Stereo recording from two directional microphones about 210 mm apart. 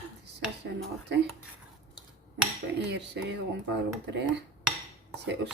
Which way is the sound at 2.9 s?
55° right (ahead or behind).